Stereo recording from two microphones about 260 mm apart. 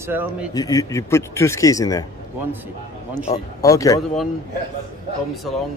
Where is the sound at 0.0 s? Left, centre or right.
Centre.